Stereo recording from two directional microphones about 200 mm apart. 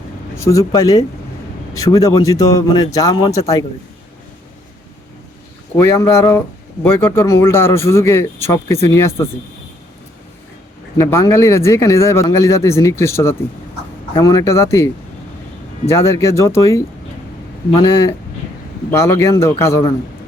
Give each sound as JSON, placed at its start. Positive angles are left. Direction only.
{"t": 0.3, "sound": "speech", "side_deg": 15}
{"t": 5.7, "sound": "speech", "side_deg": 15}
{"t": 10.9, "sound": "speech", "side_deg": 15}
{"t": 15.9, "sound": "speech", "side_deg": 15}
{"t": 18.9, "sound": "speech", "side_deg": 15}